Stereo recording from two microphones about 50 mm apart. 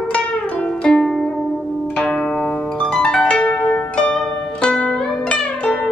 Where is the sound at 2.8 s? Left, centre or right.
Centre.